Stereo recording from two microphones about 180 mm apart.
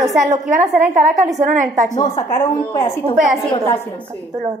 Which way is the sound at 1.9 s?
20° left (ahead or behind).